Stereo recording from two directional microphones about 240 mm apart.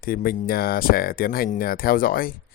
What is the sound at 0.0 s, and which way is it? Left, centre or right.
Speech, left.